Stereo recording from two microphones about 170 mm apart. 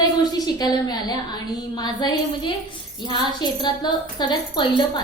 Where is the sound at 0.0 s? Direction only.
25° left (ahead or behind).